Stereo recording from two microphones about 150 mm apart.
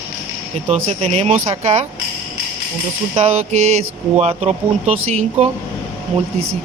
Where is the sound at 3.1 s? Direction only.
45° right (ahead or behind).